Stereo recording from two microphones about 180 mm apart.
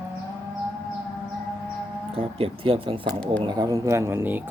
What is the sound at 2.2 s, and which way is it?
Speech, 30° right (ahead or behind).